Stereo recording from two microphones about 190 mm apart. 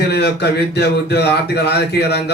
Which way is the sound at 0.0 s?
60° left (ahead or behind).